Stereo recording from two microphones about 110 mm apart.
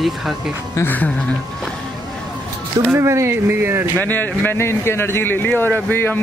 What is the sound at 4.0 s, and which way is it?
A man's voice, 15° left (ahead or behind).